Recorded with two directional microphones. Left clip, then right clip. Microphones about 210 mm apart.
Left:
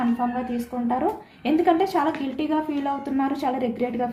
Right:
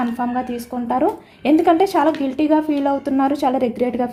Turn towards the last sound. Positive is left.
turn(degrees=-50)  # may be behind; listen again after turning